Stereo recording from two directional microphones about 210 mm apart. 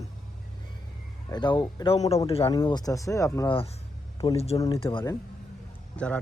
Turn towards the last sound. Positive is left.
turn(degrees=5)  # may be behind; listen again after turning